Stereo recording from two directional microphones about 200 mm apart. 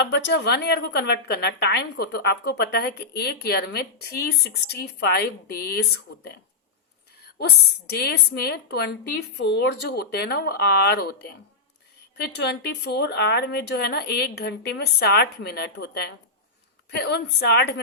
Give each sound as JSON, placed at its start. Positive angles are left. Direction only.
{"t": 0.3, "sound": "a woman's voice", "side_deg": 60}
{"t": 7.3, "sound": "a woman's voice", "side_deg": 55}
{"t": 12.1, "sound": "speech", "side_deg": 55}